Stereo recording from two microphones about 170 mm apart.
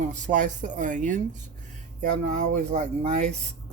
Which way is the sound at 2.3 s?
40° right (ahead or behind).